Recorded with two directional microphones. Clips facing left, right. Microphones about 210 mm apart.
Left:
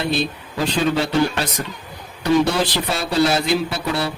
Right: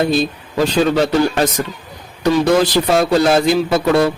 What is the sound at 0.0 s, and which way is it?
A man's voice, 45° right (ahead or behind).